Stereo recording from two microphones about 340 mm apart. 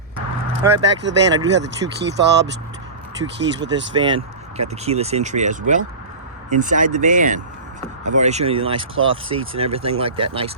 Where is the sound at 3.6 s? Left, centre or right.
Right.